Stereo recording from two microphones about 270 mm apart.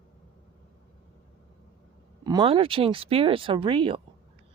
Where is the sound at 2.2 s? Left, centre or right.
Centre.